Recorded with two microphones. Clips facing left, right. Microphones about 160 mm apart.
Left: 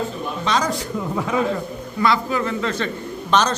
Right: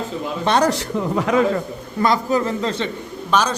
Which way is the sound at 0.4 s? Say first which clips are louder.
Right 5 dB; 65° right (ahead or behind).